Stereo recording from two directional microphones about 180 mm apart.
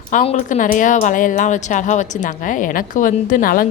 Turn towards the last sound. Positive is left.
turn(degrees=50)  # may be behind; listen again after turning